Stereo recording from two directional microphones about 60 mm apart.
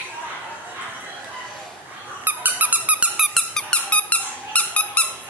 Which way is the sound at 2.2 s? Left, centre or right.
Right.